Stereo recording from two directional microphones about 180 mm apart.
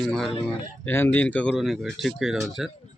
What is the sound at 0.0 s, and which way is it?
Speech, centre (ahead or behind).